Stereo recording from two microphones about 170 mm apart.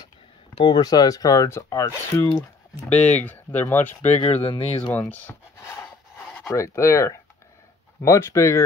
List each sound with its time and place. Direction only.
0.6 s speech: 25° left (ahead or behind)
4.0 s speech: 40° left (ahead or behind)
6.3 s speech: 15° left (ahead or behind)